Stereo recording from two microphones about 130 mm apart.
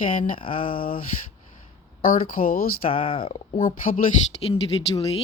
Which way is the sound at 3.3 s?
80° left.